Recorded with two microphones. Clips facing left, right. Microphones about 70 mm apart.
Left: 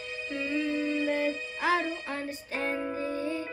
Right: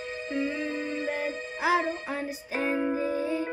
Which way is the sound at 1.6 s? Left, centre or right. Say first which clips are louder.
Right 3 dB; centre.